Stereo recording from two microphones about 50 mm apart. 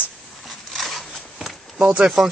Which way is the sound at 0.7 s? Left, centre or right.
Centre.